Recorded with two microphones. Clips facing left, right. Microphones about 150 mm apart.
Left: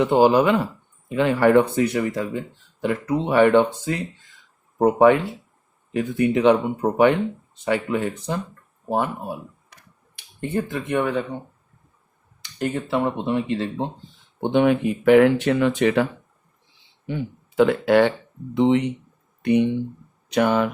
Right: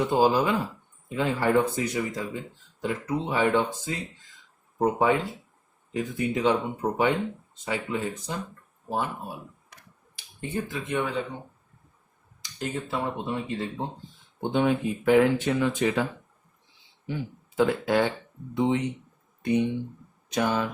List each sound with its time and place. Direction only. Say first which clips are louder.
0.0 s speech: left 6 dB; 70° left (ahead or behind)
10.4 s speech: left 6 dB; 60° left (ahead or behind)
12.4 s speech: left 6 dB; 65° left (ahead or behind)
17.1 s speech: left 5 dB; 70° left (ahead or behind)